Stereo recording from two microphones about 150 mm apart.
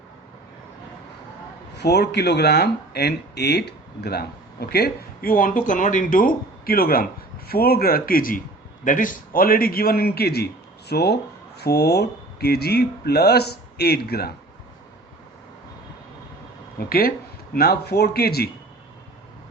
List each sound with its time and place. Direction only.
1.8 s a man's voice: 90° left
16.9 s speech: 90° left